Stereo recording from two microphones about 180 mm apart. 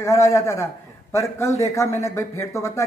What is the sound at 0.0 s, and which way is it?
Speech, 15° left (ahead or behind).